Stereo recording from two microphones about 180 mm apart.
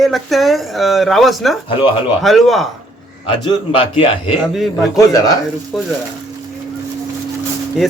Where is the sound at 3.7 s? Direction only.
30° left (ahead or behind).